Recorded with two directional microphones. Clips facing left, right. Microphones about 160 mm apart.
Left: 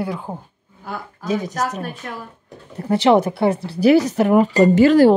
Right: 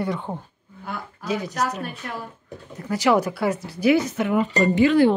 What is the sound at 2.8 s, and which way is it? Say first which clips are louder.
Speech: left 5 dB; 30° left (ahead or behind).